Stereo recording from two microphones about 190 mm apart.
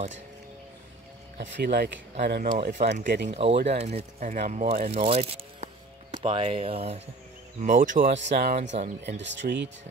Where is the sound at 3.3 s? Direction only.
30° right (ahead or behind).